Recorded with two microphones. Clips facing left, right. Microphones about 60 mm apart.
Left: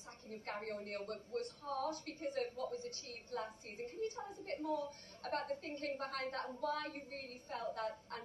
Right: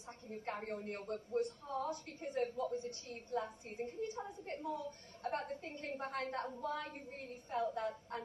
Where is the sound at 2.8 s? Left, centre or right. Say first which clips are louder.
Right 3 dB; left.